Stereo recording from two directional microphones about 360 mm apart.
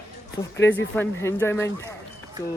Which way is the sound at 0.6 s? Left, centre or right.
Centre.